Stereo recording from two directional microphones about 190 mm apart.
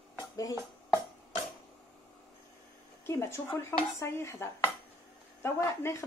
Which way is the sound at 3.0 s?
15° left (ahead or behind).